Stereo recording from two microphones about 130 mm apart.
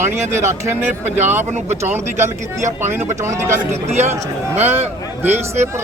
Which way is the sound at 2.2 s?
20° right (ahead or behind).